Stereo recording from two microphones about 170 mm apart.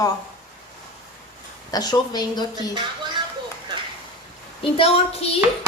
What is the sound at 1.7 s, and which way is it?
Speech, 25° left (ahead or behind).